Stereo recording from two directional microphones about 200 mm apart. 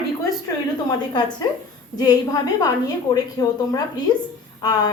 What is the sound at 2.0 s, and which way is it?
A woman's voice, 20° left (ahead or behind).